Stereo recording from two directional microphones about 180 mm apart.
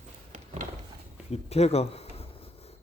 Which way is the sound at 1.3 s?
35° left (ahead or behind).